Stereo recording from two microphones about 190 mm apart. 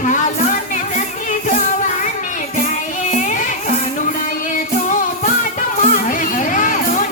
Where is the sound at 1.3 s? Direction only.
40° left (ahead or behind).